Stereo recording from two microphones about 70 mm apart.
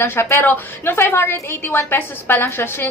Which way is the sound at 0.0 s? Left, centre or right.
Left.